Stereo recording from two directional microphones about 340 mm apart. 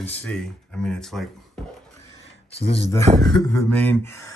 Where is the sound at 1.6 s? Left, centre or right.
Centre.